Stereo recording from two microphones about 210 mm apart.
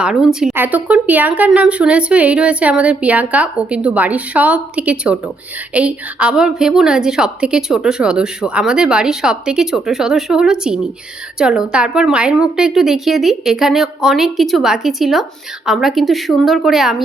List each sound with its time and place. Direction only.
0.0 s a woman's voice: 5° right (ahead or behind)